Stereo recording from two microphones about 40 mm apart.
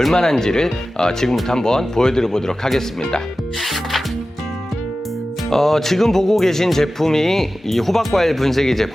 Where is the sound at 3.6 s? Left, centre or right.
Centre.